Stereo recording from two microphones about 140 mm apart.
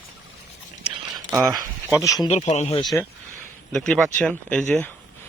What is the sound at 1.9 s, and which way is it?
Speech, 20° left (ahead or behind).